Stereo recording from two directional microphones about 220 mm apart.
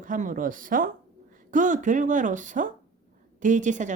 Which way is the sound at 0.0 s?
35° right (ahead or behind).